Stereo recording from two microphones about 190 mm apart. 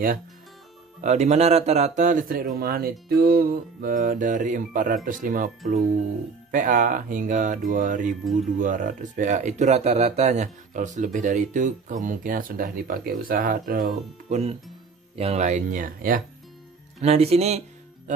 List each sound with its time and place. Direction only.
1.0 s speech: 35° right (ahead or behind)
15.1 s speech: 35° right (ahead or behind)
17.0 s speech: 35° right (ahead or behind)